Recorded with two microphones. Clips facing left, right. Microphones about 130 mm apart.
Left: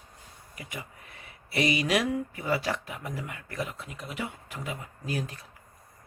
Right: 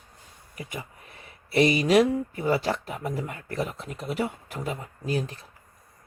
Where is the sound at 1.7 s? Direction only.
30° right (ahead or behind).